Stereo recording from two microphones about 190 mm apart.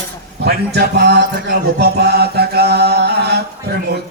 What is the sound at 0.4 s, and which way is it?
Mantra, 60° right (ahead or behind).